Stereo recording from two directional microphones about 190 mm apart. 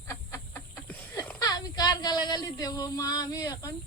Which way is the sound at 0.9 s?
10° left (ahead or behind).